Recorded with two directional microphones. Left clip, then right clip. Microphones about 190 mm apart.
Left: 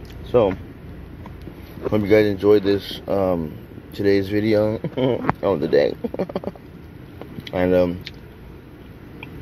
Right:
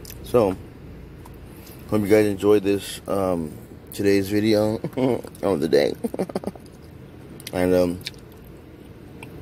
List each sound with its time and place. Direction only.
0.3 s speech: 25° right (ahead or behind)
1.9 s speech: 15° right (ahead or behind)
7.5 s speech: 20° right (ahead or behind)